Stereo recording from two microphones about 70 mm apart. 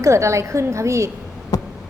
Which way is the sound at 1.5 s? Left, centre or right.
Left.